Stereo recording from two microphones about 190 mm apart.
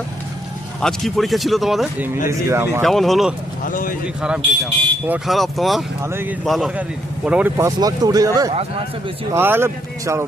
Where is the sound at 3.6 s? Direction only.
45° left (ahead or behind).